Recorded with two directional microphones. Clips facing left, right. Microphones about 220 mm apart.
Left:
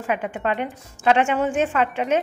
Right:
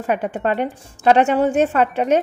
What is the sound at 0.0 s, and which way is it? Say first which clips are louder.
Speech: right 4 dB; 40° right (ahead or behind).